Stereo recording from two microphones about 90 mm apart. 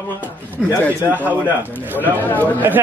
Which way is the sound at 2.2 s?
20° left (ahead or behind).